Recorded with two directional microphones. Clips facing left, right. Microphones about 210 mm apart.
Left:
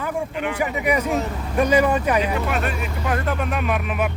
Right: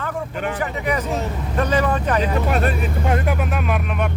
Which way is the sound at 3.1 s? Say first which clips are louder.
Left 1 dB; 10° right (ahead or behind).